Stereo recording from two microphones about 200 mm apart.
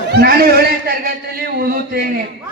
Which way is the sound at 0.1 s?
50° right (ahead or behind).